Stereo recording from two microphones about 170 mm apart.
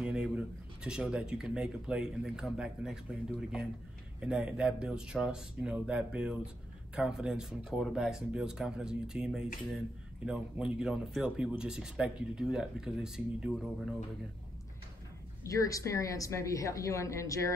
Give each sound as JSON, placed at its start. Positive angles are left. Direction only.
{"t": 0.0, "sound": "speech", "side_deg": -5}
{"t": 15.4, "sound": "a woman's voice", "side_deg": 20}